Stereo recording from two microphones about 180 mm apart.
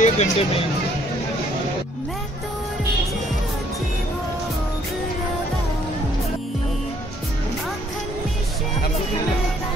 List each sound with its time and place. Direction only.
0.0 s speech: 40° left (ahead or behind)